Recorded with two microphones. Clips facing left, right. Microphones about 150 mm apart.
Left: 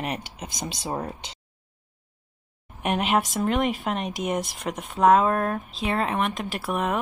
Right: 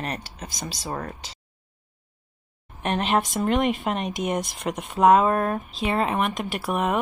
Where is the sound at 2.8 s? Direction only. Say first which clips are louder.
Even; 5° left (ahead or behind).